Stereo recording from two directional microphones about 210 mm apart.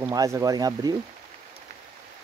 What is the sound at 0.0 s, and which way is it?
Speech, 15° right (ahead or behind).